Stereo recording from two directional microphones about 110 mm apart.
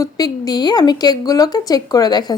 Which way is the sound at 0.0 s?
35° left (ahead or behind).